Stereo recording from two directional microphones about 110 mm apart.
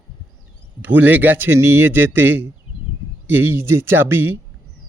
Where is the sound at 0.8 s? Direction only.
15° right (ahead or behind).